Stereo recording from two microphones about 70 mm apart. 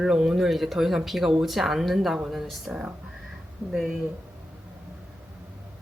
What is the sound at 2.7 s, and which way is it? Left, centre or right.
Speech, centre.